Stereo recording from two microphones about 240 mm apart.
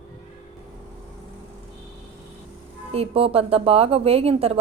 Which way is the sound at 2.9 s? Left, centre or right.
Right.